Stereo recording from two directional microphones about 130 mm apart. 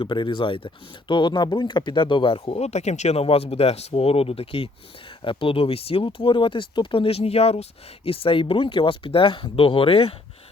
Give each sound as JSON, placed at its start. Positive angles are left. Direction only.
{"t": 0.0, "sound": "speech", "side_deg": 40}